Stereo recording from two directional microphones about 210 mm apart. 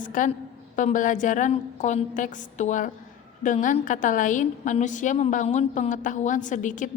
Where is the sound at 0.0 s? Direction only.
40° left (ahead or behind).